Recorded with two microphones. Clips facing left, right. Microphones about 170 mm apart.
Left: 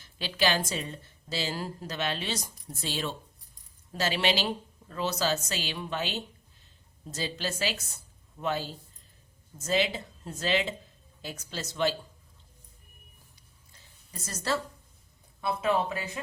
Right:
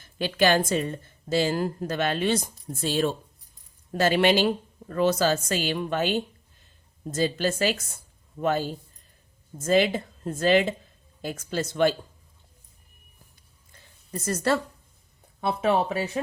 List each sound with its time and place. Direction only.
0.0 s a woman's voice: 50° right (ahead or behind)
14.1 s a woman's voice: 60° right (ahead or behind)